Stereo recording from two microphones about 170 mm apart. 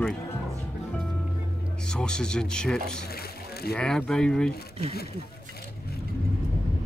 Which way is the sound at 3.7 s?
10° left (ahead or behind).